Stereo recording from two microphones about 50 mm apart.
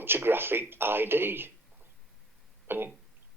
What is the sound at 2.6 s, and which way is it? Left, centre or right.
Throat clearing, right.